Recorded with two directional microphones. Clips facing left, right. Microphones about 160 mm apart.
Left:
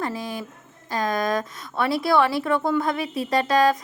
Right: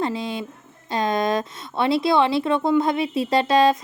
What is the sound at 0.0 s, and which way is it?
Speech, 25° right (ahead or behind).